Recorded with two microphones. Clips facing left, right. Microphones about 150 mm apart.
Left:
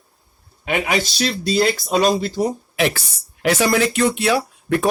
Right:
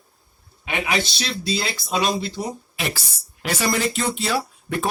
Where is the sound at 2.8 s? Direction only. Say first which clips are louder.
Left 12 dB; 65° left (ahead or behind).